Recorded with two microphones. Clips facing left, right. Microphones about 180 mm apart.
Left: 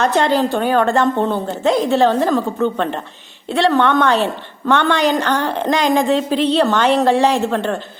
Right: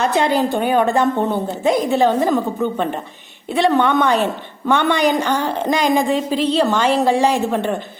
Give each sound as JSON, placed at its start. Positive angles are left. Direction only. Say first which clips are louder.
{"t": 0.0, "sound": "a woman's voice", "louder": "left 1 dB", "side_deg": -10}